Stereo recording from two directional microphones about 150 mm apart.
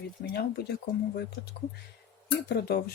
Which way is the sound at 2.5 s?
90° left.